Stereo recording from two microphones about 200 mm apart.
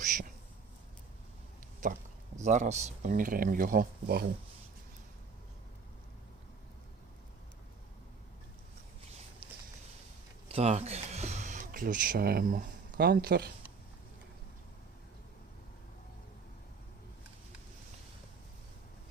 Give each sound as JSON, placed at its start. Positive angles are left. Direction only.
{"t": 0.0, "sound": "a sound", "side_deg": -40}
{"t": 1.8, "sound": "speech", "side_deg": -40}
{"t": 10.5, "sound": "speech", "side_deg": -30}